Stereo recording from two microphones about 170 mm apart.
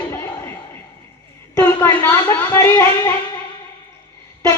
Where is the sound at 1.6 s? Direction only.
15° left (ahead or behind).